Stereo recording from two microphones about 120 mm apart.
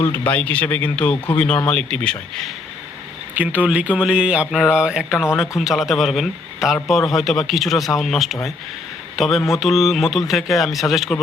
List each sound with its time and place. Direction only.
0.0 s speech: 15° left (ahead or behind)
3.3 s a man's voice: 15° right (ahead or behind)